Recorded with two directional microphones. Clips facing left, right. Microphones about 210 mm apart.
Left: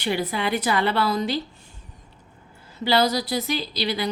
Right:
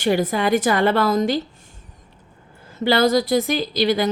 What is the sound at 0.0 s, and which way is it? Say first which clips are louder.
A woman's voice: right 6 dB; 45° right (ahead or behind).